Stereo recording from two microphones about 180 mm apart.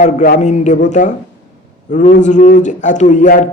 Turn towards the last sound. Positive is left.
turn(degrees=45)  # may be behind; listen again after turning